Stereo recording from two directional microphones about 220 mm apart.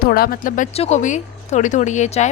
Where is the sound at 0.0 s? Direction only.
45° left (ahead or behind).